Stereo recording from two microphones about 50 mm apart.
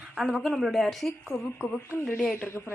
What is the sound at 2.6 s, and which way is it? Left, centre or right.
Speech, centre.